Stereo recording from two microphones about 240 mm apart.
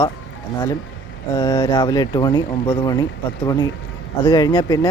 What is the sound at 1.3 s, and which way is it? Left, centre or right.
Speech, left.